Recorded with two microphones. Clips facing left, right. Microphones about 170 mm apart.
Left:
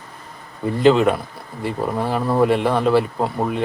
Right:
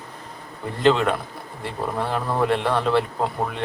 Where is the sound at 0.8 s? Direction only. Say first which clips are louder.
Left 4 dB; 5° left (ahead or behind).